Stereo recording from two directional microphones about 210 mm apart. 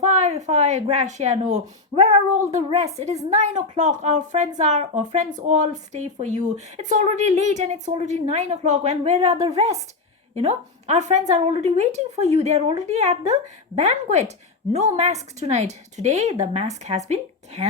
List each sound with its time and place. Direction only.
0.0 s speech: 30° right (ahead or behind)